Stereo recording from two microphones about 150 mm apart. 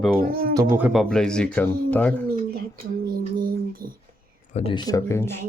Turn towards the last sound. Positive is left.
turn(degrees=20)  # may be behind; listen again after turning